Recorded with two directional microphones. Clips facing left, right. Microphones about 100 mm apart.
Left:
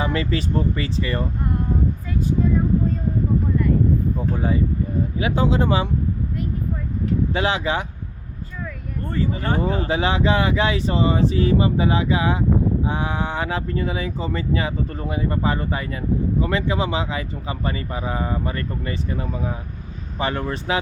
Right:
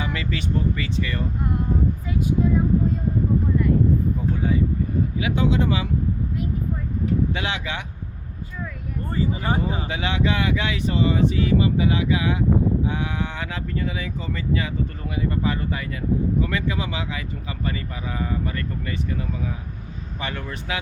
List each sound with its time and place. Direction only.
0.0 s speech: 35° left (ahead or behind)
4.4 s speech: 35° left (ahead or behind)
7.3 s speech: 35° left (ahead or behind)
9.0 s speech: 10° right (ahead or behind)
9.8 s speech: 35° left (ahead or behind)